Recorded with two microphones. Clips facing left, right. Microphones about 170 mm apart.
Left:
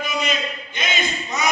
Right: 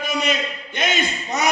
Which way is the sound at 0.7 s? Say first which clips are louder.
Right 4 dB; 75° right (ahead or behind).